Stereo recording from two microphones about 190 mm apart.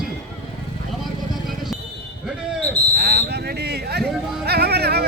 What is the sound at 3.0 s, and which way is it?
Speech, 55° right (ahead or behind).